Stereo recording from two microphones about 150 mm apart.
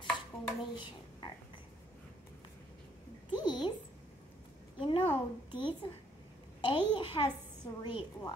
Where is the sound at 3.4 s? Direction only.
30° left (ahead or behind).